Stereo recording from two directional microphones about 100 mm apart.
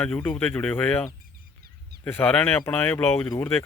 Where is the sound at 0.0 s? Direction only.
20° left (ahead or behind).